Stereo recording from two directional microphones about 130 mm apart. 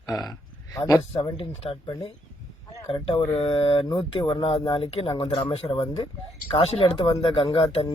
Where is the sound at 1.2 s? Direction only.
45° left (ahead or behind).